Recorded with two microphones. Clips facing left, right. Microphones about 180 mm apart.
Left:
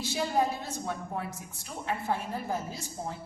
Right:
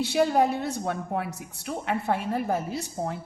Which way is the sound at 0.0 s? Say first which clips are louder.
Right 7 dB; 65° right (ahead or behind).